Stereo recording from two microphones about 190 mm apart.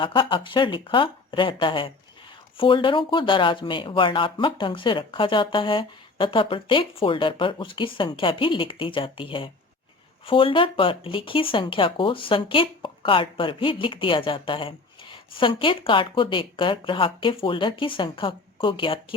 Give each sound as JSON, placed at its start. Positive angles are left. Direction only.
{"t": 0.0, "sound": "speech", "side_deg": 25}